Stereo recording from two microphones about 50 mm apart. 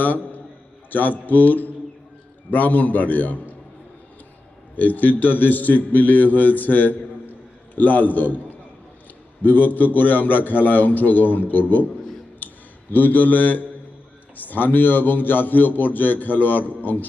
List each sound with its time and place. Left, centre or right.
0.9 s a man's voice: left
4.7 s a man's voice: left
12.4 s a sound: left
12.9 s a man's voice: left